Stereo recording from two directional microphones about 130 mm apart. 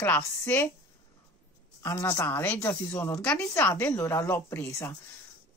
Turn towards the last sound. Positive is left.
turn(degrees=20)  # may be behind; listen again after turning